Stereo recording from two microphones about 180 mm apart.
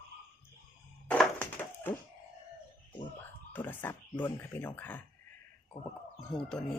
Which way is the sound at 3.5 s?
10° left (ahead or behind).